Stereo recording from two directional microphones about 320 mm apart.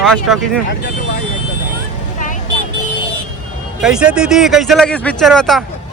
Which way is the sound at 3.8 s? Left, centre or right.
Centre.